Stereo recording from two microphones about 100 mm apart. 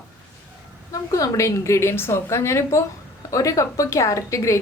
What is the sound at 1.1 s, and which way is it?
A woman's voice, 35° left (ahead or behind).